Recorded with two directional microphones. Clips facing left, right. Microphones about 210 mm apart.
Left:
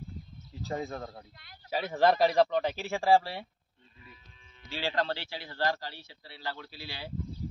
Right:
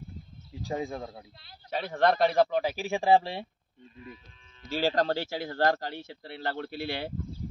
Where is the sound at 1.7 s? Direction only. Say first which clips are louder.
Even; 5° left (ahead or behind); by 3.4 s 25° right (ahead or behind).